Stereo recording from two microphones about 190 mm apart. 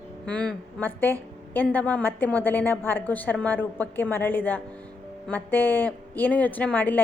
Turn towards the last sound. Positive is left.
turn(degrees=10)  # may be behind; listen again after turning